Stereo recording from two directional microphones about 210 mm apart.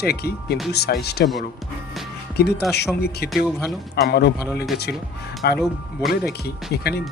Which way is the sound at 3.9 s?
50° left (ahead or behind).